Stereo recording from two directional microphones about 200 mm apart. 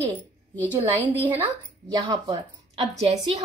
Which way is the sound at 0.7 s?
10° right (ahead or behind).